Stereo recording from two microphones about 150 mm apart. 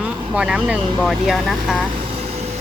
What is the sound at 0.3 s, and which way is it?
Speech, 5° right (ahead or behind).